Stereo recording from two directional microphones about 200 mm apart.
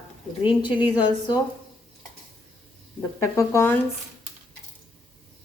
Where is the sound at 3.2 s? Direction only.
15° left (ahead or behind).